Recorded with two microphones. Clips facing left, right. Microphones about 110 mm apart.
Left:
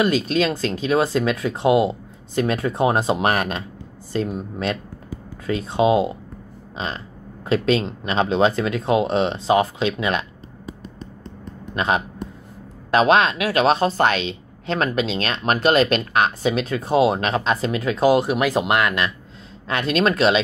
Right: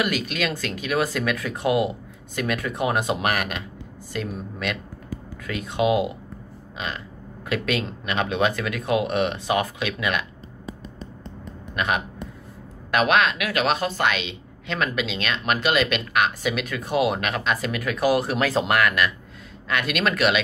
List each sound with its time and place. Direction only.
0.0 s a woman's voice: 30° left (ahead or behind)
11.7 s a woman's voice: 30° left (ahead or behind)